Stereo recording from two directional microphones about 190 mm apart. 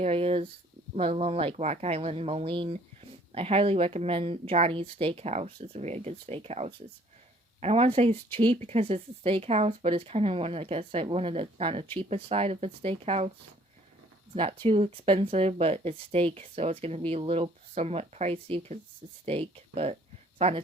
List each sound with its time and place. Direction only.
0.0 s speech: 30° right (ahead or behind)
14.3 s speech: 30° right (ahead or behind)